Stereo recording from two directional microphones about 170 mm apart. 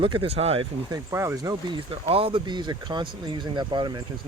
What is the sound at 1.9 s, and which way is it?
Speech, 35° right (ahead or behind).